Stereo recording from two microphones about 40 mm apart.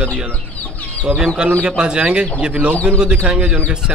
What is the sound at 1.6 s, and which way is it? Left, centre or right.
Speech, right.